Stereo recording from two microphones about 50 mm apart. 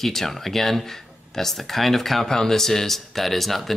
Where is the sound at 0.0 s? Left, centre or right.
Centre.